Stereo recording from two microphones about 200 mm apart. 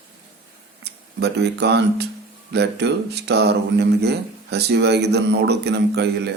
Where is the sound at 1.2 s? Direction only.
55° right (ahead or behind).